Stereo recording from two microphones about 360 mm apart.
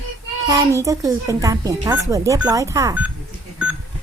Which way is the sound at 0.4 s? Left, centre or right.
Centre.